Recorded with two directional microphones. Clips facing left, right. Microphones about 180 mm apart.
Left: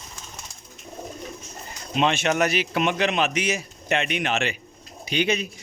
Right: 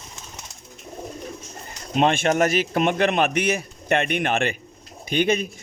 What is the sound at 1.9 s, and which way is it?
A man's voice, 50° right (ahead or behind).